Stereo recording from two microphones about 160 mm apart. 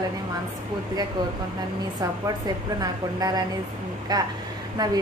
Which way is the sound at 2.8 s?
25° right (ahead or behind).